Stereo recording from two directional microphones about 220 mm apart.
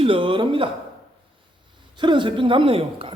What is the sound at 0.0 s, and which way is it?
Speech, 25° right (ahead or behind).